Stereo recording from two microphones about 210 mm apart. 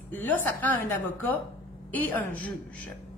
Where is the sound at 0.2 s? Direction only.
10° left (ahead or behind).